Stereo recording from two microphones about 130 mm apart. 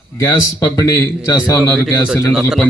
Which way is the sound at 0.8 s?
25° left (ahead or behind).